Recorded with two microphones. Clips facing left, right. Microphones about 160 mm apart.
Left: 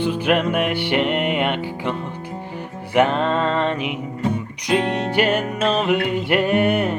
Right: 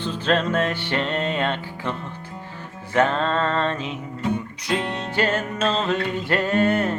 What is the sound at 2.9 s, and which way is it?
Music, 15° left (ahead or behind).